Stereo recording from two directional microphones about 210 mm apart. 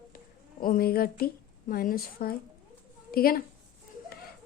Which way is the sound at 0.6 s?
45° left (ahead or behind).